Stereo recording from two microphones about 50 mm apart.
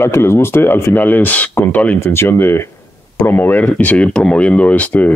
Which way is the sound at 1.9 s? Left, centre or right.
Left.